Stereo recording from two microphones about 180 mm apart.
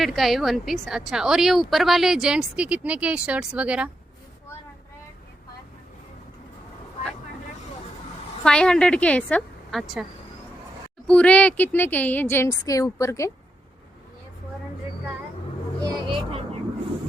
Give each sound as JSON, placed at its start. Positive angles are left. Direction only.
{"t": 0.0, "sound": "a woman's voice", "side_deg": 0}
{"t": 8.4, "sound": "a woman's voice", "side_deg": 5}
{"t": 15.8, "sound": "vehicle", "side_deg": -25}